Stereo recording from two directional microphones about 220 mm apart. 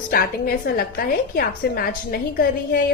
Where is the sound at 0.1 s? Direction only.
45° left (ahead or behind).